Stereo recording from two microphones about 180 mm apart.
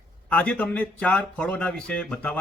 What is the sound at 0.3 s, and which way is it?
A man's voice, 5° left (ahead or behind).